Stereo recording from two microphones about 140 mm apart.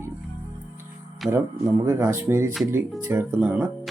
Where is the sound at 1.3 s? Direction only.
15° right (ahead or behind).